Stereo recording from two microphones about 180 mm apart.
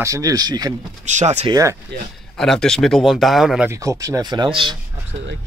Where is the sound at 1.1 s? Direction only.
40° right (ahead or behind).